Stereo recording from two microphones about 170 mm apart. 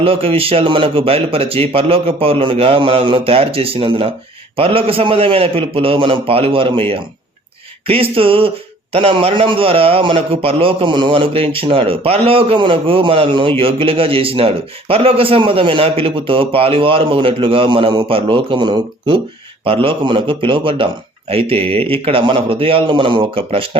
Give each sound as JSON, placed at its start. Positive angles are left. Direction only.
{"t": 0.0, "sound": "speech", "side_deg": -35}